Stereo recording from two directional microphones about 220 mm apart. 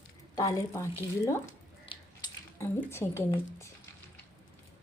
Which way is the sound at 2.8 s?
10° left (ahead or behind).